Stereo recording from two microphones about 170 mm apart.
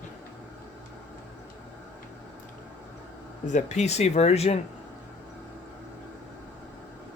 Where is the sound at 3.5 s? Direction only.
45° left (ahead or behind).